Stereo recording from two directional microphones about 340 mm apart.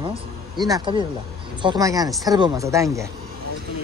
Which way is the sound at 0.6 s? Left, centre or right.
Centre.